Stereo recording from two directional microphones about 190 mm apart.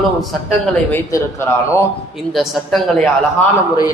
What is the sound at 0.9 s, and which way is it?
Speech, 15° left (ahead or behind).